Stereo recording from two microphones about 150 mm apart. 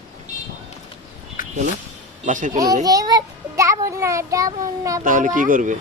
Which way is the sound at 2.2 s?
60° right (ahead or behind).